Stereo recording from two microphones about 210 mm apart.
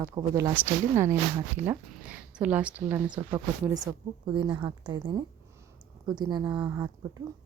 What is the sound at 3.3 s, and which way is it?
A woman's voice, 15° right (ahead or behind).